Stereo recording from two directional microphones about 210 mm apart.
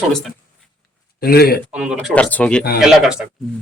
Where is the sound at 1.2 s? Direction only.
45° left (ahead or behind).